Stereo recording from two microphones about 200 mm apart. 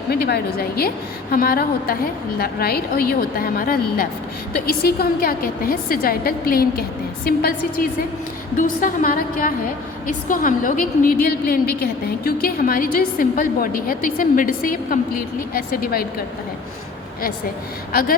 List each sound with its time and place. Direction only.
0.1 s a woman's voice: 50° left (ahead or behind)
4.8 s a woman's voice: 50° left (ahead or behind)